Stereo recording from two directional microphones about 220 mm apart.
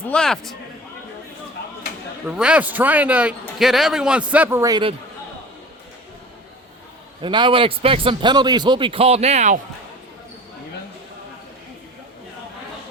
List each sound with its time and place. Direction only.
0.1 s a man's voice: 5° left (ahead or behind)
2.2 s a man's voice: 5° right (ahead or behind)
7.2 s a man's voice: 20° right (ahead or behind)